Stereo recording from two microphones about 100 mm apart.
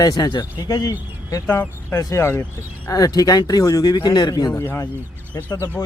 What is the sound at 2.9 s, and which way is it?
Speech, 40° left (ahead or behind).